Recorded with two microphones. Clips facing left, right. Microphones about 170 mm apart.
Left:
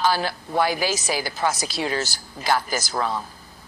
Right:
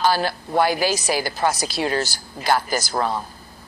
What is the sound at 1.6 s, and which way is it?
Speech, 55° right (ahead or behind).